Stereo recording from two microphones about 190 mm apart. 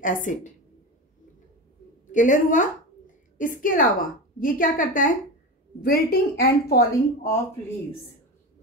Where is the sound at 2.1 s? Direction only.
40° left (ahead or behind).